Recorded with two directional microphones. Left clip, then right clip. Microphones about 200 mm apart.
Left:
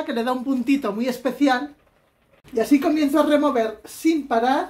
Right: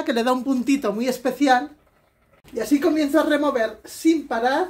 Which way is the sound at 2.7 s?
35° left (ahead or behind).